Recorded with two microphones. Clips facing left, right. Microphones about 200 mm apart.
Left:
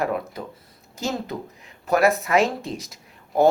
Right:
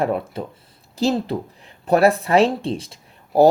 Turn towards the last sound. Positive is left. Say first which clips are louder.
# right 4 dB
turn(degrees=-35)  # may be behind; listen again after turning